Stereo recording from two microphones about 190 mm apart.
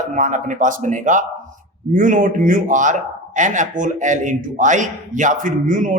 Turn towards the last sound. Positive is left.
turn(degrees=-40)  # may be behind; listen again after turning